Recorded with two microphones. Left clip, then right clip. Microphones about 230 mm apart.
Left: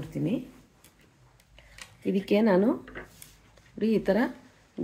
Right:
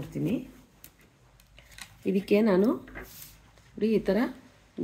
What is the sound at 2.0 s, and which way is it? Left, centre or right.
Speech, centre.